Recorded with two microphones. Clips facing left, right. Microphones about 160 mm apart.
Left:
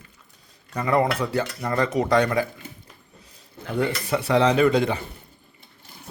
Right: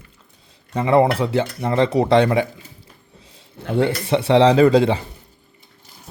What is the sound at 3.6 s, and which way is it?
Speech, 30° right (ahead or behind).